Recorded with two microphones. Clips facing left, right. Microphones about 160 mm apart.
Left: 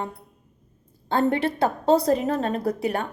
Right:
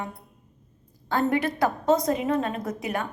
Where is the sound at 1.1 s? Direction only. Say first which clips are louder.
Left 2 dB; 30° left (ahead or behind).